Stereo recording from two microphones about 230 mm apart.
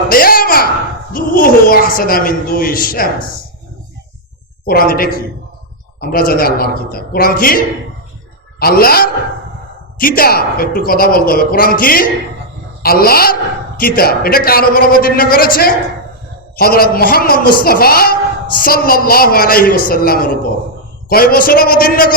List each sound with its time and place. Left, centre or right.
0.1 s a sound: left
1.1 s a man's voice: left
4.6 s a man's voice: left